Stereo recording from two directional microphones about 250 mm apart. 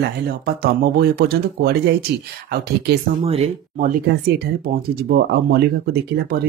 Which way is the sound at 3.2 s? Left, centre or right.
Right.